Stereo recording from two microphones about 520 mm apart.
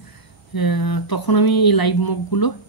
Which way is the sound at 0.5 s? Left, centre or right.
Left.